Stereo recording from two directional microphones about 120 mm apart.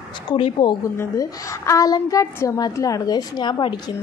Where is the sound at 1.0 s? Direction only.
25° left (ahead or behind).